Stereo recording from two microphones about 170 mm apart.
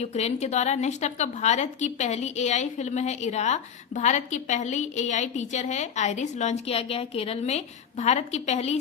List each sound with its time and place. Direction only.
0.0 s a woman's voice: 40° left (ahead or behind)